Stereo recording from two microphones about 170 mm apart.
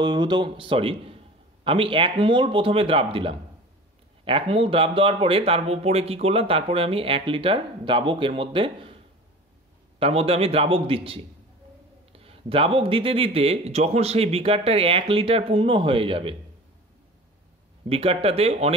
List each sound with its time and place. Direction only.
0.0 s speech: 25° right (ahead or behind)
9.9 s speech: 35° right (ahead or behind)
17.8 s speech: 35° right (ahead or behind)